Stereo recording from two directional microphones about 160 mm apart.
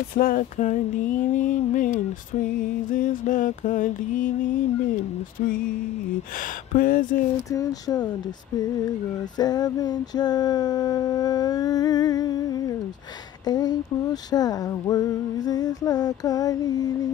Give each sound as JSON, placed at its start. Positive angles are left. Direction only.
{"t": 0.1, "sound": "a sound", "side_deg": 60}
{"t": 2.9, "sound": "mantra", "side_deg": 55}
{"t": 6.7, "sound": "mantra", "side_deg": 60}
{"t": 7.5, "sound": "music", "side_deg": 25}
{"t": 9.4, "sound": "music", "side_deg": 25}